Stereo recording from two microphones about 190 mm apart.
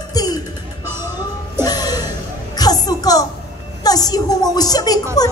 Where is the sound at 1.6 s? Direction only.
20° left (ahead or behind).